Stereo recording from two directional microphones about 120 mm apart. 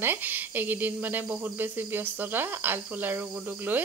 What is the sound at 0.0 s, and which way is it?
Speech, 15° right (ahead or behind).